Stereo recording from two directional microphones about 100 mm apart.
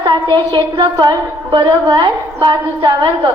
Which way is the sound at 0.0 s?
50° right (ahead or behind).